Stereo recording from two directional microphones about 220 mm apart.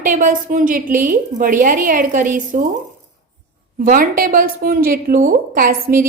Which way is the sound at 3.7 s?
40° right (ahead or behind).